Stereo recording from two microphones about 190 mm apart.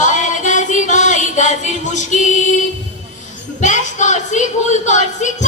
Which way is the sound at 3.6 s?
40° left (ahead or behind).